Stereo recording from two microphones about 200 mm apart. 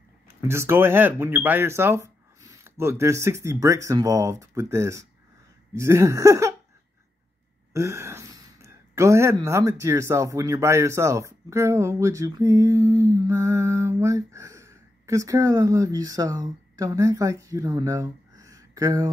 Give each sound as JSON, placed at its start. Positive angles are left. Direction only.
{"t": 0.3, "sound": "speech", "side_deg": -15}
{"t": 5.8, "sound": "a sound", "side_deg": -15}
{"t": 7.7, "sound": "speech", "side_deg": -15}